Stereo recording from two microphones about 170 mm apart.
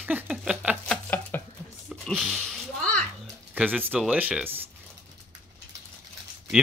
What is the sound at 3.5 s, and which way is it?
Speech, 10° right (ahead or behind).